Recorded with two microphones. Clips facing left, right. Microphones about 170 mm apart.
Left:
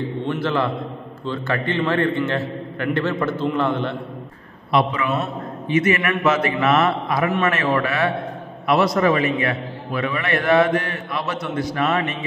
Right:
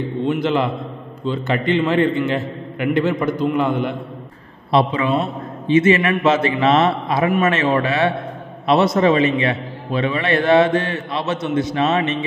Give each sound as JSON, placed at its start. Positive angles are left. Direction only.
{"t": 0.3, "sound": "a man's voice", "side_deg": -20}
{"t": 4.7, "sound": "a man's voice", "side_deg": -30}